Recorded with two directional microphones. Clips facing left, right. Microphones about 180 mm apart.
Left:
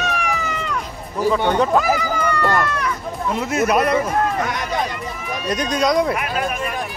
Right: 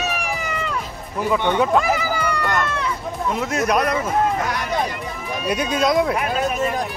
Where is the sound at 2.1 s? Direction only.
10° right (ahead or behind).